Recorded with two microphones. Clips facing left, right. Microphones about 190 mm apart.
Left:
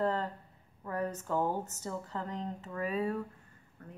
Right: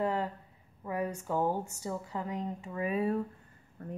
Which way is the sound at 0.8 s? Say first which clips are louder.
Right 1 dB; 10° right (ahead or behind).